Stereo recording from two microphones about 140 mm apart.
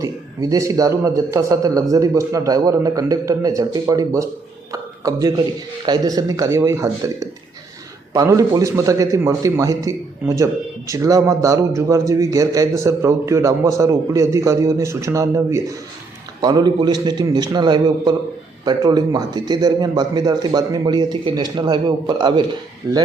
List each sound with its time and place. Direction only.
0.0 s a man's voice: 25° right (ahead or behind)
4.7 s a sound: 25° right (ahead or behind)
5.8 s a man's voice: 30° right (ahead or behind)